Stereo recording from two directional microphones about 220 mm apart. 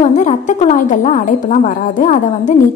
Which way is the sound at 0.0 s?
30° left (ahead or behind).